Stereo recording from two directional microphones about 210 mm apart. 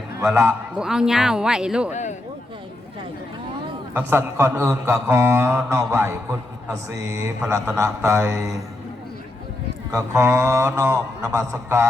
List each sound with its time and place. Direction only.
0.3 s speech: 10° right (ahead or behind)
1.9 s speech: 35° left (ahead or behind)
3.9 s speech: 10° right (ahead or behind)
9.9 s speech: 15° right (ahead or behind)